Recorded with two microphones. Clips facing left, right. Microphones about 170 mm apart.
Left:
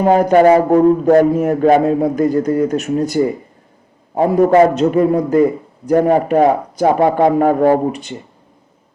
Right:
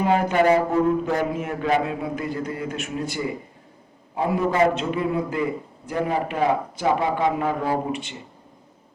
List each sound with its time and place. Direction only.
0.0 s a man's voice: 40° left (ahead or behind)